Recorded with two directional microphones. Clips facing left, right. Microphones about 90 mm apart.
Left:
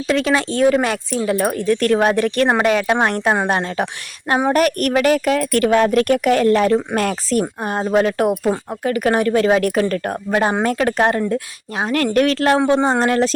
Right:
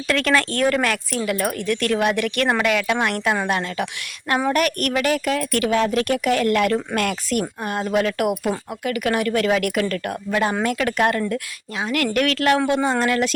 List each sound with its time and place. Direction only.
0.1 s speech: 15° left (ahead or behind)
1.2 s a woman's voice: 30° left (ahead or behind)
11.8 s a woman's voice: 35° left (ahead or behind)